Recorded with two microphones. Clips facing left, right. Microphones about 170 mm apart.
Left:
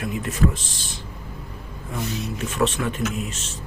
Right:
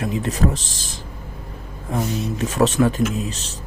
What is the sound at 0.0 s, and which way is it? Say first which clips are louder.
Speech: right 2 dB; 35° right (ahead or behind).